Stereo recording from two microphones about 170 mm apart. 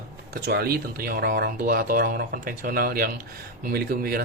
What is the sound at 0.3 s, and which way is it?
Speech, 70° right (ahead or behind).